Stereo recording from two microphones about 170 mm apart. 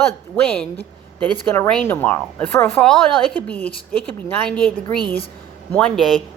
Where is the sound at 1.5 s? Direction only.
10° left (ahead or behind).